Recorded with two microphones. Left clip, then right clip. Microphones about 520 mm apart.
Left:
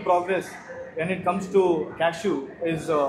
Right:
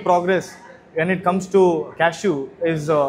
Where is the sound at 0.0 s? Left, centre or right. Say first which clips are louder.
Right 5 dB; right.